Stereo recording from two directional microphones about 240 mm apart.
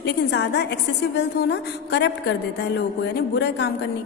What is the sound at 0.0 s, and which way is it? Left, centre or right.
A woman's voice, left.